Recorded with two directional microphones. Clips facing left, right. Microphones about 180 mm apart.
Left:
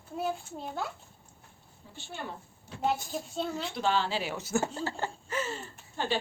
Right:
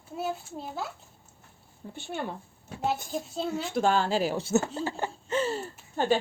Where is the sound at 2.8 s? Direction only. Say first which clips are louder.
Right 1 dB; centre (ahead or behind).